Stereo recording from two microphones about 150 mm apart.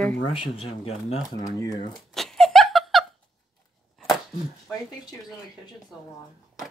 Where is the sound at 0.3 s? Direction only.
35° left (ahead or behind).